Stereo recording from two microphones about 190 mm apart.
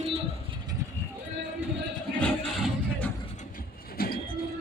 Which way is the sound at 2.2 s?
5° left (ahead or behind).